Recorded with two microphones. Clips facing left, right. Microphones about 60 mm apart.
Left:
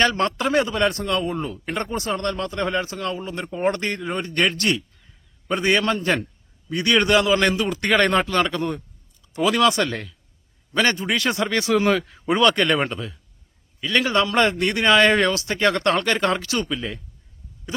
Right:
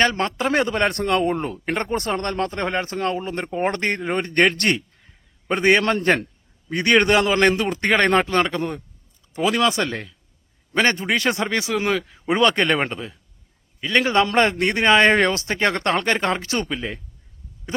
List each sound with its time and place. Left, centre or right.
0.0 s speech: right
0.5 s a man's voice: right
11.9 s speech: centre
12.3 s speech: right